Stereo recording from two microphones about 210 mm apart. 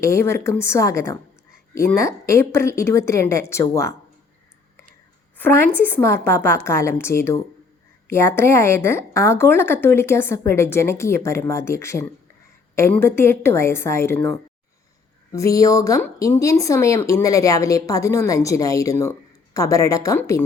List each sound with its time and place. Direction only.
0.0 s speech: 15° left (ahead or behind)
5.4 s speech: 10° left (ahead or behind)
15.3 s speech: 15° left (ahead or behind)